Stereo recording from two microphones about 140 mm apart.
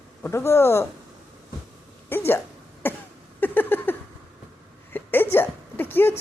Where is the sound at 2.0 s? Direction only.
15° left (ahead or behind).